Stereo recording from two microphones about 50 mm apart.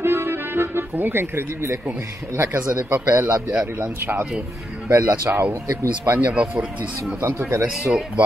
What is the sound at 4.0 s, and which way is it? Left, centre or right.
Speech, right.